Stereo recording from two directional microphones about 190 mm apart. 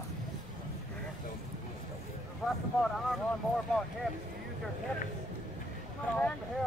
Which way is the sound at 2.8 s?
5° left (ahead or behind).